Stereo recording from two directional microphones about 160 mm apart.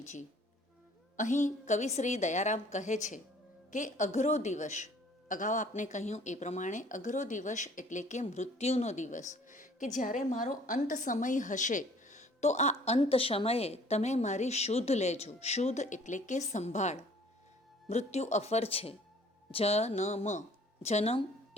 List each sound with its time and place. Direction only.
0.0 s speech: 45° left (ahead or behind)